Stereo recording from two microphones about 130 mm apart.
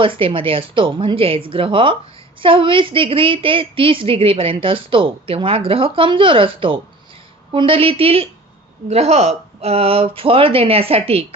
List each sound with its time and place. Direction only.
0.0 s a woman's voice: 40° right (ahead or behind)